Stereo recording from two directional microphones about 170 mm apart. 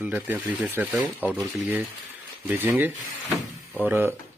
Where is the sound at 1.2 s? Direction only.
10° left (ahead or behind).